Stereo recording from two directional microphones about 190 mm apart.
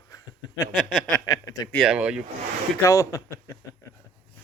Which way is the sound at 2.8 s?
15° left (ahead or behind).